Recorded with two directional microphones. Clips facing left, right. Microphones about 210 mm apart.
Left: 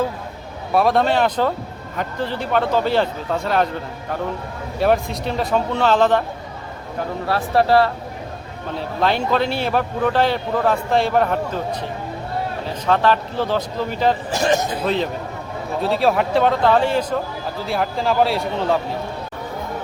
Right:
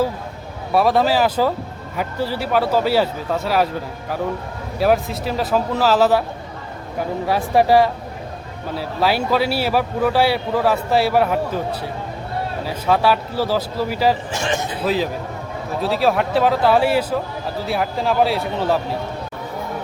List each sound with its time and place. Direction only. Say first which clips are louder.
0.7 s speech: right 1 dB; centre (ahead or behind)
4.8 s speech: right 1 dB; centre (ahead or behind)
7.3 s speech: right 1 dB; 15° right (ahead or behind)
14.3 s a man's voice: left 4 dB; 40° left (ahead or behind)
14.8 s speech: right 3 dB; 5° right (ahead or behind)